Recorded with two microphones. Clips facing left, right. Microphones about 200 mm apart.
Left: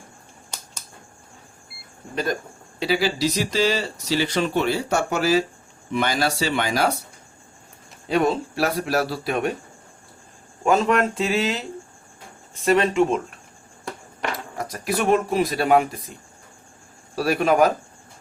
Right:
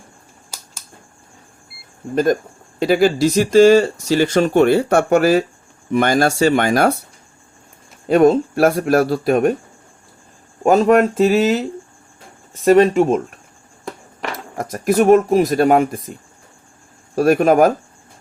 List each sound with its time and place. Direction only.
2.1 s speech: 50° right (ahead or behind)
8.1 s speech: 50° right (ahead or behind)
10.6 s speech: 45° right (ahead or behind)
12.6 s speech: 45° right (ahead or behind)
14.6 s speech: 45° right (ahead or behind)
17.2 s speech: 50° right (ahead or behind)